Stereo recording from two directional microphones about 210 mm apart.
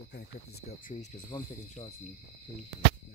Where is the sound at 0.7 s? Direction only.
35° left (ahead or behind).